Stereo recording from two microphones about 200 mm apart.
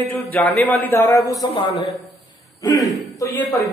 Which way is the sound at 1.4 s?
30° left (ahead or behind).